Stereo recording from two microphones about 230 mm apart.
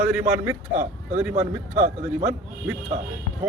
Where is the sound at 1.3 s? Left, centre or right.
Right.